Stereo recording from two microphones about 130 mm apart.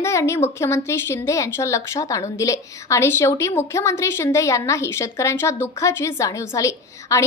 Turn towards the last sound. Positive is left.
turn(degrees=25)  # may be behind; listen again after turning